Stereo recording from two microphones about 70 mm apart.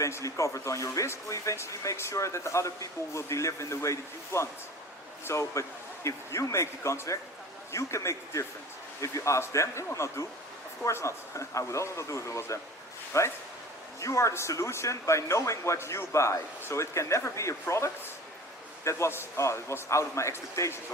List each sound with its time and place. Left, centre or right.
0.0 s speech: left